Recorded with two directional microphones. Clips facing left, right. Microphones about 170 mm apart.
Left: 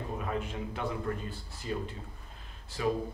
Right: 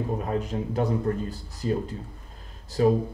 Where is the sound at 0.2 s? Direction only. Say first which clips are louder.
Right 7 dB; 40° right (ahead or behind).